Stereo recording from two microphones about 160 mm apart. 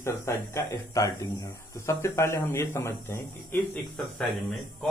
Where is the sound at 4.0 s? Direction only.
Centre (ahead or behind).